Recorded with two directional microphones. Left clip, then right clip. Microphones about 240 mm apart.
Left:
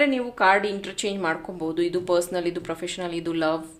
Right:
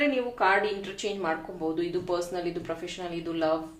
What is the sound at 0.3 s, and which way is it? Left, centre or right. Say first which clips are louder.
Speech: left 6 dB; left.